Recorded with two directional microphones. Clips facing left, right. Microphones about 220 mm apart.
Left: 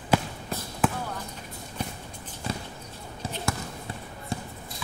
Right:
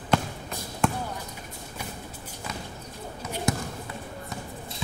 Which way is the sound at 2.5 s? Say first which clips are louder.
Left 5 dB; 30° left (ahead or behind).